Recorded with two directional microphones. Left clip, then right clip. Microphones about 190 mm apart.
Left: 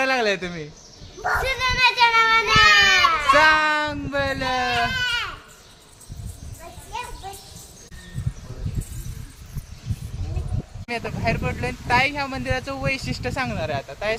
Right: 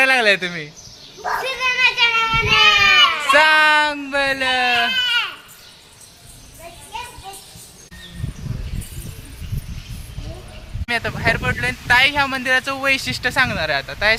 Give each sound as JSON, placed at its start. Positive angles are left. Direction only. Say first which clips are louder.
{"t": 0.0, "sound": "speech", "louder": "right 7 dB", "side_deg": 0}
{"t": 1.4, "sound": "children playing", "louder": "right 3 dB", "side_deg": 20}
{"t": 3.2, "sound": "baby cry", "louder": "right 2 dB", "side_deg": 0}
{"t": 10.8, "sound": "speech", "louder": "right 6 dB", "side_deg": 0}